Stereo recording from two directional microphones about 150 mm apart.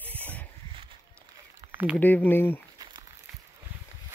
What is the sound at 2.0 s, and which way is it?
Speech, 10° left (ahead or behind).